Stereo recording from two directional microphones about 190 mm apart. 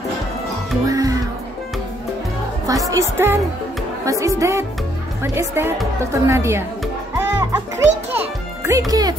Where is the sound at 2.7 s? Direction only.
15° right (ahead or behind).